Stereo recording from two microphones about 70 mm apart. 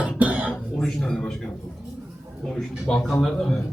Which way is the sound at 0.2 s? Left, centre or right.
Right.